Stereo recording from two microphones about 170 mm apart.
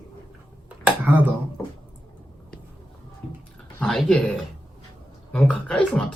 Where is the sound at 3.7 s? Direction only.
5° left (ahead or behind).